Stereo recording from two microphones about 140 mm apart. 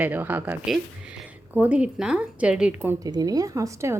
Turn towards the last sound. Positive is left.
turn(degrees=-20)  # may be behind; listen again after turning